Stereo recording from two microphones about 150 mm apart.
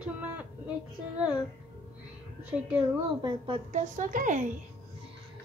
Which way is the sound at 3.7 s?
65° right (ahead or behind).